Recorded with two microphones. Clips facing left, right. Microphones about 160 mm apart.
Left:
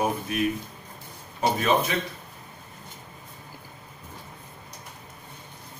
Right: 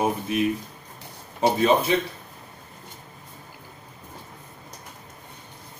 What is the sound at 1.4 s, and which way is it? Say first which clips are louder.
Speech: right 3 dB; 30° right (ahead or behind).